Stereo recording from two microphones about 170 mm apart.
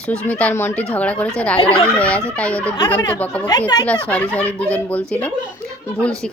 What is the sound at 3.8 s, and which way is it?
Speech, 5° left (ahead or behind).